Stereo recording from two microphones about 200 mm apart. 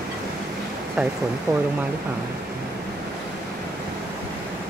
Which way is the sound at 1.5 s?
20° right (ahead or behind).